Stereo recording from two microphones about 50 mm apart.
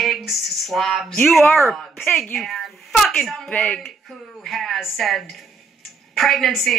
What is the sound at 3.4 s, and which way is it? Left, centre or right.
Speech, left.